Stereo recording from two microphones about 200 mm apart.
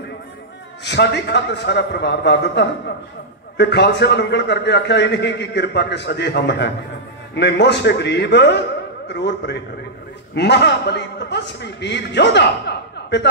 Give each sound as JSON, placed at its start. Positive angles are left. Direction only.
{"t": 0.8, "sound": "a man's voice", "side_deg": 55}